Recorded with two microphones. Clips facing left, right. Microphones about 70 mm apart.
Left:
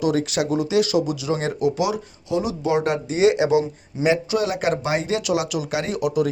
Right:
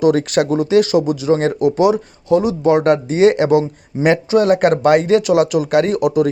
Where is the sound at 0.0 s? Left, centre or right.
Right.